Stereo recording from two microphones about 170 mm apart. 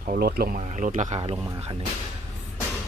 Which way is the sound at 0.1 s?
65° right (ahead or behind).